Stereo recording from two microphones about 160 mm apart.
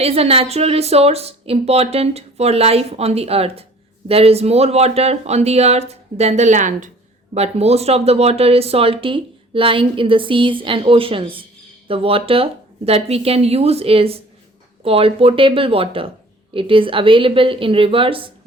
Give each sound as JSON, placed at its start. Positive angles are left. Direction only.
{"t": 0.0, "sound": "speech", "side_deg": -40}
{"t": 7.3, "sound": "speech", "side_deg": -40}